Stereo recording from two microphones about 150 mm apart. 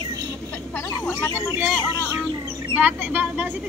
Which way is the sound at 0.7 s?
10° left (ahead or behind).